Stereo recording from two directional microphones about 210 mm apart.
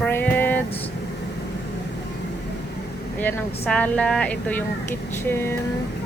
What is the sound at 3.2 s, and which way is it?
Speech, 5° left (ahead or behind).